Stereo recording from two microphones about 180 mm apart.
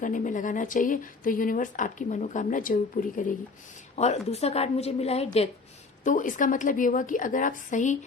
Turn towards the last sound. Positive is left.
turn(degrees=45)  # may be behind; listen again after turning